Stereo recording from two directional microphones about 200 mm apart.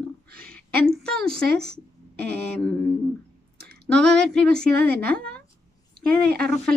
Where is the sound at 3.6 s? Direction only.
55° right (ahead or behind).